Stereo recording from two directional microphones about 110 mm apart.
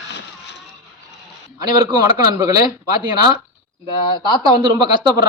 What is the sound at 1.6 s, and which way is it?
Speech, 35° right (ahead or behind).